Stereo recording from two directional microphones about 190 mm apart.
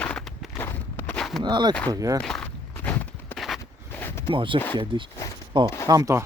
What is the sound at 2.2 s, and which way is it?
Walk, 5° left (ahead or behind).